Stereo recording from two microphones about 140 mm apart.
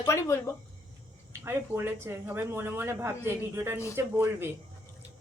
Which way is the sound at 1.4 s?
15° right (ahead or behind).